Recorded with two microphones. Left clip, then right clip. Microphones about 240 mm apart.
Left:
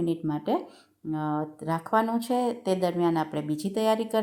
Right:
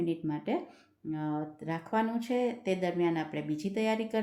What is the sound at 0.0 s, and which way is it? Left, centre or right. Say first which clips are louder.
Speech: left 5 dB; centre.